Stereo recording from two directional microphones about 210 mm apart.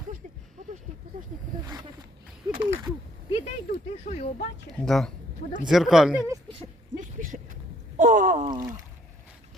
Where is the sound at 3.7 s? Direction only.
40° left (ahead or behind).